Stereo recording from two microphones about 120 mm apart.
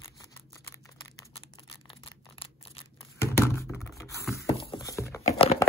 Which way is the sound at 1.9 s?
55° left (ahead or behind).